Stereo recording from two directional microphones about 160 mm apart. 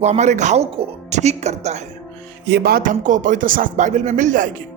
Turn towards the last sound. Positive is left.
turn(degrees=-55)  # may be behind; listen again after turning